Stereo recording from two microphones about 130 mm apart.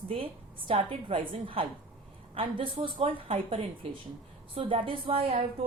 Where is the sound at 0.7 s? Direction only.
40° right (ahead or behind).